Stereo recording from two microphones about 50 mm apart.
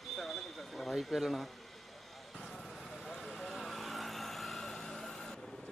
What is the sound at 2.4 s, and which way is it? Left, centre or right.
Vehicle, centre.